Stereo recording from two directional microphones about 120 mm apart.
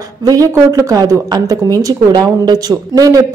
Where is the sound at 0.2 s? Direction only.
30° right (ahead or behind).